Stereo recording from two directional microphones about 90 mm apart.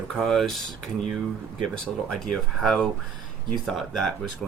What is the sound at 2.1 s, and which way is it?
Speech, 5° left (ahead or behind).